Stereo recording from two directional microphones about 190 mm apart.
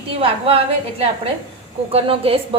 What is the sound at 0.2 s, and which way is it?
A woman's voice, 30° right (ahead or behind).